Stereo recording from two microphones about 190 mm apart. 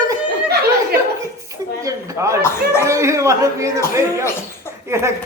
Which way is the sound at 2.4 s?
15° left (ahead or behind).